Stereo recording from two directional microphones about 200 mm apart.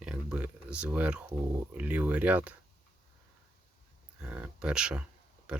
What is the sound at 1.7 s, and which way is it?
Speech, 5° right (ahead or behind).